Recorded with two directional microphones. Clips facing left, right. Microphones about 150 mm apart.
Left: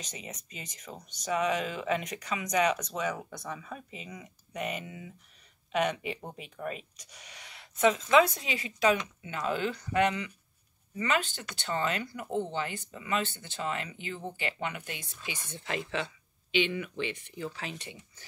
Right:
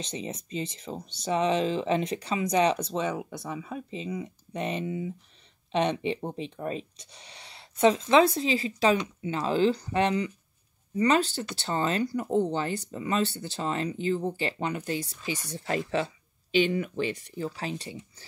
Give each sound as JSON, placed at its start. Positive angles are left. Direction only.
{"t": 0.0, "sound": "speech", "side_deg": -30}
{"t": 3.4, "sound": "speech", "side_deg": -15}
{"t": 3.9, "sound": "speech", "side_deg": -30}